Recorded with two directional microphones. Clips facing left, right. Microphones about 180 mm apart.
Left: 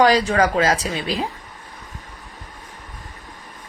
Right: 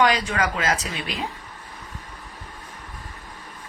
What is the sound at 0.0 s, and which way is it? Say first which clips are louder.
Speech: left 5 dB; 35° left (ahead or behind).